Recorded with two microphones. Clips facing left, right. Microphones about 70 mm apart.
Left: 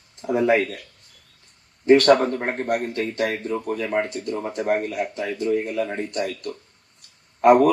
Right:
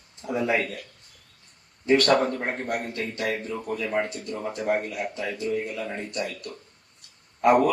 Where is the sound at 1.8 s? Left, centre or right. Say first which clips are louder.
Left 5 dB; left.